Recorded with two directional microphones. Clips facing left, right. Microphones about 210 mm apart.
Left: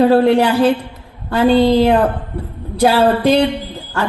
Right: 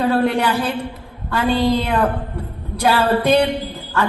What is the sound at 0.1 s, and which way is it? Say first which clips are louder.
A woman's voice: left 6 dB; 35° left (ahead or behind).